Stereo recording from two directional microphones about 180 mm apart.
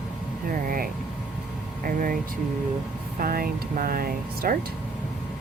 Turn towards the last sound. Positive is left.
turn(degrees=-55)  # may be behind; listen again after turning